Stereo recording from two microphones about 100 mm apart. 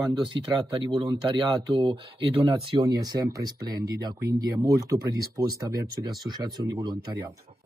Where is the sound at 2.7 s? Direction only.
45° right (ahead or behind).